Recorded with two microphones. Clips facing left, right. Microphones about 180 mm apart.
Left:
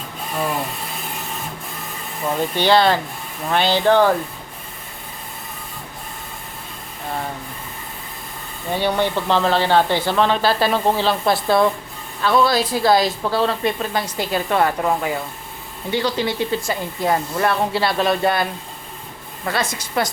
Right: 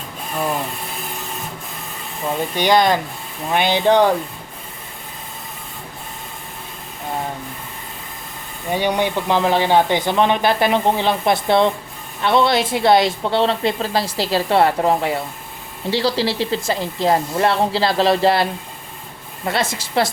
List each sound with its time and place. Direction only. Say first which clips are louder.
2.6 s speech: even; 15° right (ahead or behind)
8.7 s a woman's voice: right 1 dB; 15° right (ahead or behind)
19.5 s a woman's voice: right 2 dB; 25° right (ahead or behind)